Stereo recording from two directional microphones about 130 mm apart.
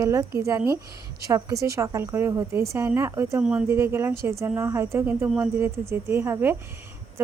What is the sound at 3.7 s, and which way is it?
Speech, 20° right (ahead or behind).